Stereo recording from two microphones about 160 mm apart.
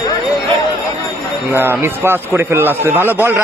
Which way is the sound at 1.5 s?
15° right (ahead or behind).